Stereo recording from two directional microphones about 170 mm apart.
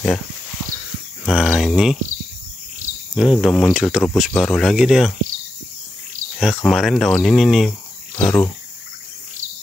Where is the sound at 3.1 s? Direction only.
Centre (ahead or behind).